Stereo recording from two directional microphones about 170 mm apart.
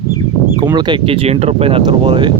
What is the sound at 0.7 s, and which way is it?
Speech, 25° right (ahead or behind).